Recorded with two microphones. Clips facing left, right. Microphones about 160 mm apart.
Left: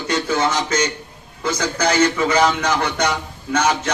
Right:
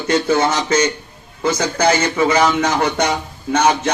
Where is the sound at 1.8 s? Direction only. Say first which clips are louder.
Right 1 dB; 30° right (ahead or behind).